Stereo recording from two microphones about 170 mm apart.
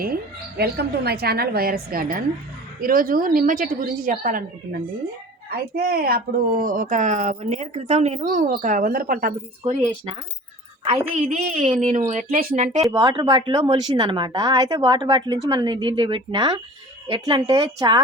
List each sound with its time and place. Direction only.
0.0 s a woman's voice: 65° right (ahead or behind)
11.1 s a woman's voice: 40° right (ahead or behind)
12.9 s speech: 25° right (ahead or behind)